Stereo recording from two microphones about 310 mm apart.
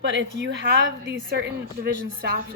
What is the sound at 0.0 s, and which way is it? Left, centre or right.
A woman's voice, right.